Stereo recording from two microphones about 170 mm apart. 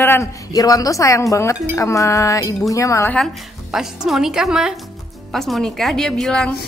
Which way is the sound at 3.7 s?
Centre (ahead or behind).